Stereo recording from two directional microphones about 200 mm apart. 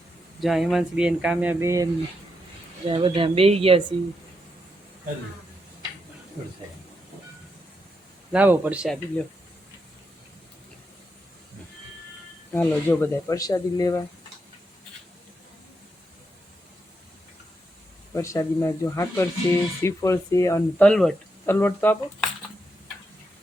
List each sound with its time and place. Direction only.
0.3 s speech: centre (ahead or behind)
2.8 s speech: 25° right (ahead or behind)
8.3 s a man's voice: 5° right (ahead or behind)
12.5 s speech: 10° left (ahead or behind)
18.1 s speech: 15° left (ahead or behind)